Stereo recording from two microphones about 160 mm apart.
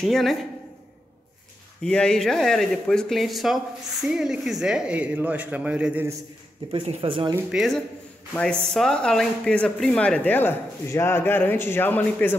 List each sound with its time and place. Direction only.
0.0 s speech: centre (ahead or behind)
1.8 s speech: 5° left (ahead or behind)
6.7 s speech: 35° right (ahead or behind)
7.5 s speech: centre (ahead or behind)